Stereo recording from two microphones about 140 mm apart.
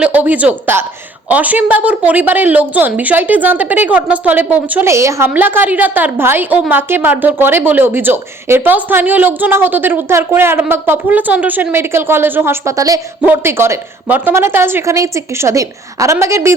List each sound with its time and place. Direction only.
0.0 s a woman's voice: 10° right (ahead or behind)